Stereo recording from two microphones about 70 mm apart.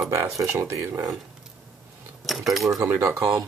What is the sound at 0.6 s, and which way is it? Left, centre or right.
Speech, right.